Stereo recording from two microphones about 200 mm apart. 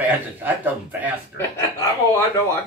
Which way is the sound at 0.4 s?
10° right (ahead or behind).